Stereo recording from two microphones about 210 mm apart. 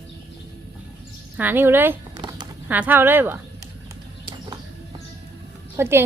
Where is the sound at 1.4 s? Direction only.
10° right (ahead or behind).